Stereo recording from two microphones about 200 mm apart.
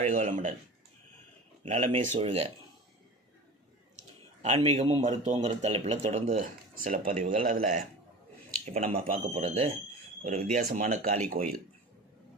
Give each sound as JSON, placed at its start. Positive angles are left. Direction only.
{"t": 0.0, "sound": "speech", "side_deg": -40}
{"t": 1.6, "sound": "speech", "side_deg": -35}
{"t": 4.4, "sound": "speech", "side_deg": -30}
{"t": 8.4, "sound": "a sound", "side_deg": -35}
{"t": 9.1, "sound": "speech", "side_deg": -30}
{"t": 10.2, "sound": "speech", "side_deg": -40}